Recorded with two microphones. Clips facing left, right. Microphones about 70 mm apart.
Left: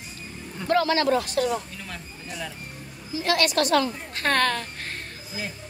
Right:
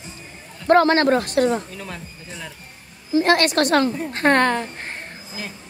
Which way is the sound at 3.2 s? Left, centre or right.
Right.